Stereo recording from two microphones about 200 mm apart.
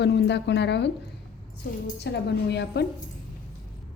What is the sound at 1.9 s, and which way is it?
Speech, 60° left (ahead or behind).